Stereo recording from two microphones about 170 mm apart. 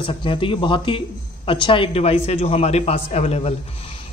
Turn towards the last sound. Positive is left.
turn(degrees=35)  # may be behind; listen again after turning